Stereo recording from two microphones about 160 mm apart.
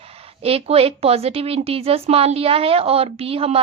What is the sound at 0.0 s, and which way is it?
A woman's voice, 40° right (ahead or behind).